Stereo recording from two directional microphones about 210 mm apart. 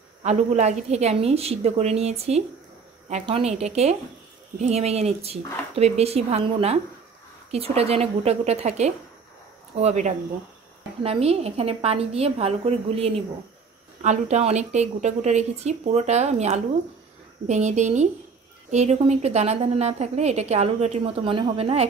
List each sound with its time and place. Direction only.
0.2 s a woman's voice: 35° right (ahead or behind)